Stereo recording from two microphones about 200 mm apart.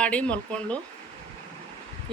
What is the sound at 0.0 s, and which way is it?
Speech, 5° left (ahead or behind).